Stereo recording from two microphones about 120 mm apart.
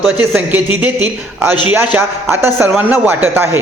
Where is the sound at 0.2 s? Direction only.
15° right (ahead or behind).